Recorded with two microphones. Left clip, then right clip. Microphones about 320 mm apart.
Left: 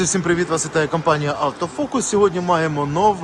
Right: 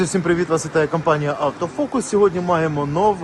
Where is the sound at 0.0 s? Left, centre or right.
Centre.